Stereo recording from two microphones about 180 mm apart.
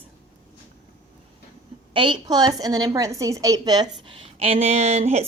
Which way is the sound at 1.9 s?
25° right (ahead or behind).